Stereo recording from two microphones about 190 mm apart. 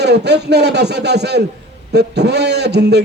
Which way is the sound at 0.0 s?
65° right (ahead or behind).